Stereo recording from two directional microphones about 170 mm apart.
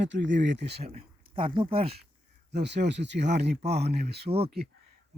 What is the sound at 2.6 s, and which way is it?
Speech, 90° right.